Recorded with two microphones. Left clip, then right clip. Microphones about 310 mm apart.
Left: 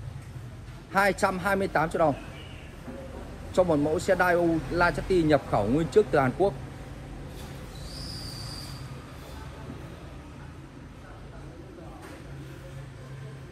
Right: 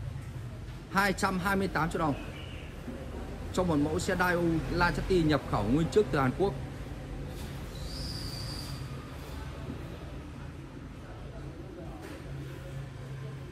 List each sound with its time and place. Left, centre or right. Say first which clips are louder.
0.9 s speech: left 5 dB; centre
3.5 s speech: left 6 dB; centre